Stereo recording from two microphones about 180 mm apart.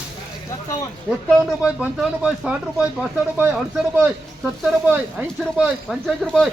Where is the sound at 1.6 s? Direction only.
5° right (ahead or behind).